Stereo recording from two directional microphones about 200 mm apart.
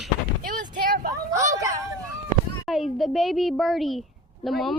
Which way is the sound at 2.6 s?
Centre (ahead or behind).